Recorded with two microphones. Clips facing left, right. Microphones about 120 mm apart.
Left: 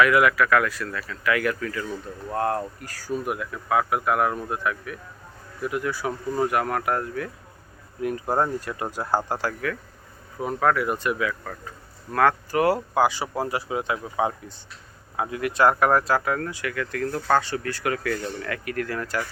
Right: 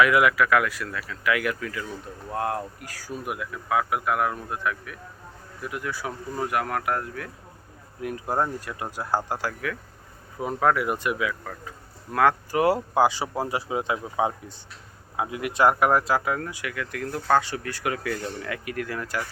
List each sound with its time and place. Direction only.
0.0 s speech: 15° right (ahead or behind)
10.4 s speech: 15° right (ahead or behind)